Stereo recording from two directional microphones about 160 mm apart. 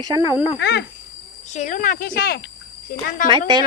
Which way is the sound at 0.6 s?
90° left.